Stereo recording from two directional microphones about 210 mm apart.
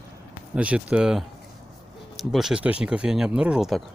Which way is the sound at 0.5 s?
5° right (ahead or behind).